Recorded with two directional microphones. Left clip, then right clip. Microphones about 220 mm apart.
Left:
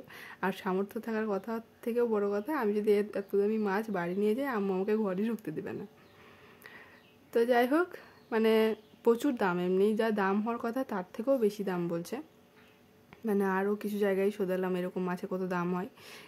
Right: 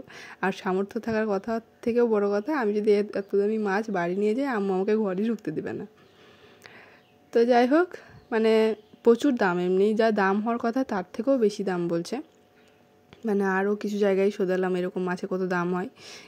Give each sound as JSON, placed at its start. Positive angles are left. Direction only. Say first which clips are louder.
{"t": 0.1, "sound": "a woman's voice", "louder": "right 6 dB", "side_deg": -20}